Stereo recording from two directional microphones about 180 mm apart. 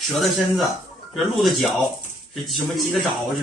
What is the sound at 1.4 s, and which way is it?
Speech, centre (ahead or behind).